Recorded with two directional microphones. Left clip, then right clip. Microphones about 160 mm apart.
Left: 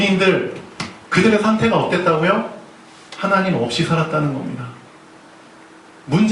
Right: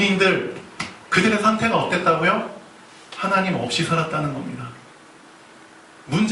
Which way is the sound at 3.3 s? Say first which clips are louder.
Left 3 dB; 20° right (ahead or behind).